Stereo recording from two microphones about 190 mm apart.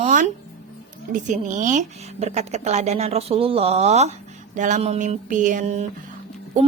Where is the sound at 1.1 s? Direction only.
40° right (ahead or behind).